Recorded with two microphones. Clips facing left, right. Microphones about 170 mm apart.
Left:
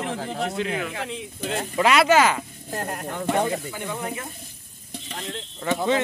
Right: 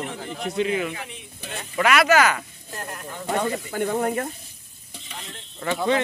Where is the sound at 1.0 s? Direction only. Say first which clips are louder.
Left 8 dB; 90° left.